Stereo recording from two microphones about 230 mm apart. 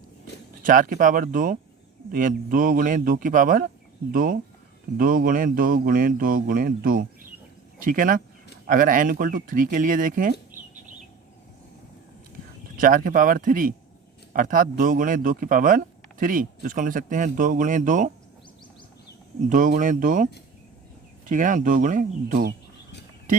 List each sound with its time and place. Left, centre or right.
0.6 s speech: right
12.7 s speech: right
19.5 s speech: right